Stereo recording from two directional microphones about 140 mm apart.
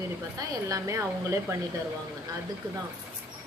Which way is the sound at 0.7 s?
20° right (ahead or behind).